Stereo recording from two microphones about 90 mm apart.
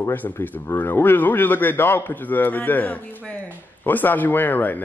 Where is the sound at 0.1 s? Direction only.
20° left (ahead or behind).